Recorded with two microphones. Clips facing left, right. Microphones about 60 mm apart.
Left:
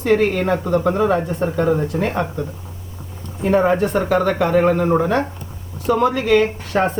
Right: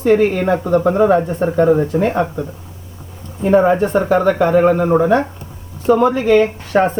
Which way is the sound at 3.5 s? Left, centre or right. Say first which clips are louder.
Right 4 dB; centre.